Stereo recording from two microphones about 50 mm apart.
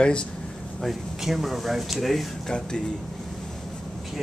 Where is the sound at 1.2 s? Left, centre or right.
Centre.